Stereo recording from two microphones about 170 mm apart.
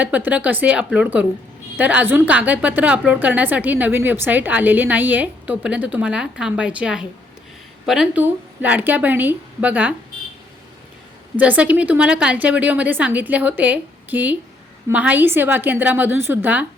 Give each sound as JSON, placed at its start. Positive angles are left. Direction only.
{"t": 0.0, "sound": "a woman's voice", "side_deg": -10}
{"t": 11.3, "sound": "a woman's voice", "side_deg": -10}